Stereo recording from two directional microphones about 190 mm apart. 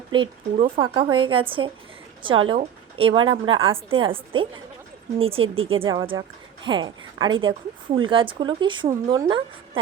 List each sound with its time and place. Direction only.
0.1 s a woman's voice: 25° right (ahead or behind)